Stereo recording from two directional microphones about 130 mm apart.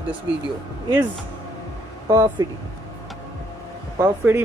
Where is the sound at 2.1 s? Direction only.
25° right (ahead or behind).